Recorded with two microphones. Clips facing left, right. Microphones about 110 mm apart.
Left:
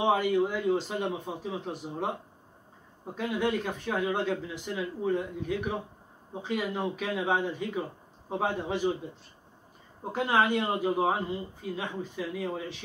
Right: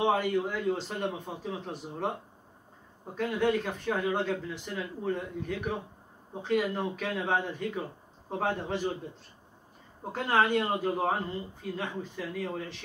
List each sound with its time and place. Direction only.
0.0 s a man's voice: 5° left (ahead or behind)
3.2 s speech: 5° left (ahead or behind)
10.1 s speech: 5° left (ahead or behind)